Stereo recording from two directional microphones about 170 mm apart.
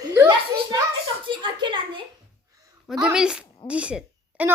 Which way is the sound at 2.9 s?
5° right (ahead or behind).